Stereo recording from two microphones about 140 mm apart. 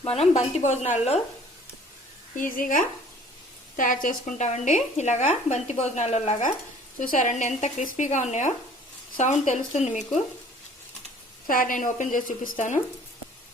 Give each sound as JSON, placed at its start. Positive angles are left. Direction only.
{"t": 0.0, "sound": "speech", "side_deg": 45}
{"t": 2.3, "sound": "a woman's voice", "side_deg": 70}
{"t": 11.4, "sound": "speech", "side_deg": 80}